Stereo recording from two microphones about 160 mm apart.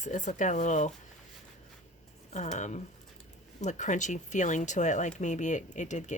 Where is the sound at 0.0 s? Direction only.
50° left (ahead or behind).